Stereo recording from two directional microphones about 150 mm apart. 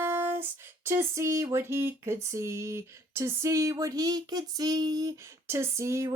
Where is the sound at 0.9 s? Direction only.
20° right (ahead or behind).